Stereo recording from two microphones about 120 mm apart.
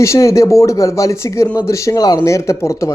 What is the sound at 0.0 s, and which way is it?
A man's voice, 25° left (ahead or behind).